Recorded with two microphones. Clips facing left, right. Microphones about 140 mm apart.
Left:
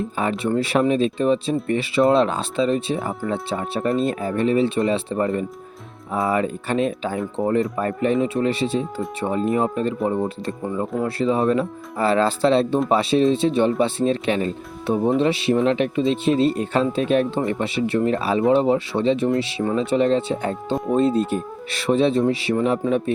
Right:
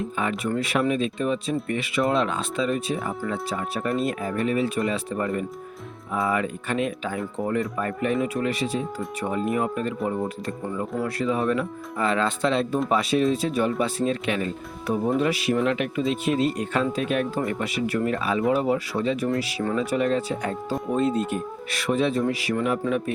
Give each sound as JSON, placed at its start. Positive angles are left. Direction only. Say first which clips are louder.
{"t": 0.2, "sound": "speech", "louder": "left 5 dB", "side_deg": 30}